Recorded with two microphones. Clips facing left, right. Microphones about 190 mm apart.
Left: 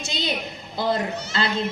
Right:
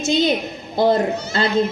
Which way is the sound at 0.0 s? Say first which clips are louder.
Right 10 dB; 45° right (ahead or behind).